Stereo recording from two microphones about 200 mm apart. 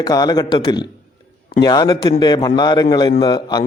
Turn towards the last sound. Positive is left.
turn(degrees=20)  # may be behind; listen again after turning